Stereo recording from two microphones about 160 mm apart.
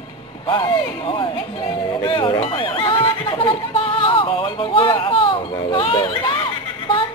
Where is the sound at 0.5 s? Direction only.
30° left (ahead or behind).